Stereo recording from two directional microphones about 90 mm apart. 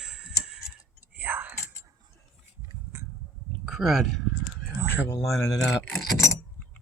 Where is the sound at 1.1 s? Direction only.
20° right (ahead or behind).